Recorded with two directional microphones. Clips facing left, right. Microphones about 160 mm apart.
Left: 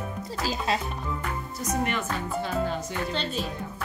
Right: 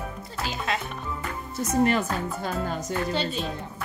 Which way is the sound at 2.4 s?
45° right (ahead or behind).